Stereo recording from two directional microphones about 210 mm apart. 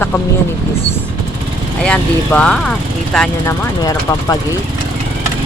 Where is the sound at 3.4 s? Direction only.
15° left (ahead or behind).